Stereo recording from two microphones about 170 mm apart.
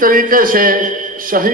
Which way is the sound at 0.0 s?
50° right (ahead or behind).